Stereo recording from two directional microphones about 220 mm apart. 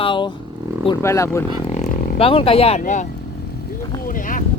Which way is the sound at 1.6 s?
30° left (ahead or behind).